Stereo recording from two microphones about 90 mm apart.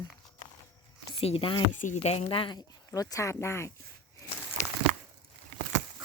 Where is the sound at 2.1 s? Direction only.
90° left.